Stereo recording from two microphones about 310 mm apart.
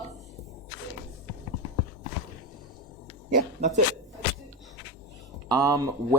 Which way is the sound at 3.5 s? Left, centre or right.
Right.